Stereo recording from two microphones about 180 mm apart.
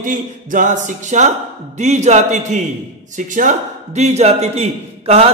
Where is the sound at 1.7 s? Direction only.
40° right (ahead or behind).